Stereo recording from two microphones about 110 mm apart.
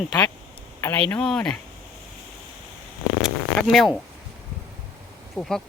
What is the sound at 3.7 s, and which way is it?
Speech, centre (ahead or behind).